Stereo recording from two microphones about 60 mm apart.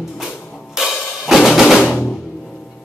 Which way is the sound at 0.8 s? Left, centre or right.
Centre.